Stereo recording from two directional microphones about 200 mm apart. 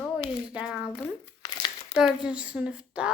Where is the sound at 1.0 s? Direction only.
20° left (ahead or behind).